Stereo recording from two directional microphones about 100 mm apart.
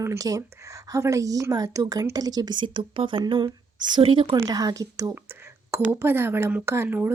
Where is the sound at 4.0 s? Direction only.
65° right (ahead or behind).